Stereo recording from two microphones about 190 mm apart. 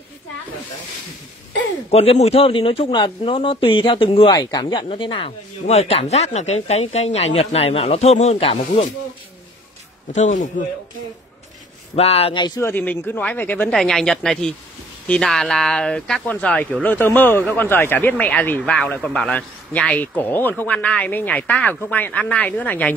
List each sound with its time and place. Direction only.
1.9 s speech: 35° left (ahead or behind)
10.1 s speech: 40° left (ahead or behind)
11.9 s a man's voice: 35° left (ahead or behind); by 22.9 s 10° left (ahead or behind)